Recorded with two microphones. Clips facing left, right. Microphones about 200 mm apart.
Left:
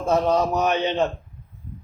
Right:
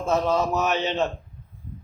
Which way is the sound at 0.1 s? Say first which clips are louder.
Left 3 dB; 15° left (ahead or behind).